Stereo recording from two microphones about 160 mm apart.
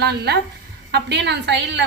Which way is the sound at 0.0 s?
90° right.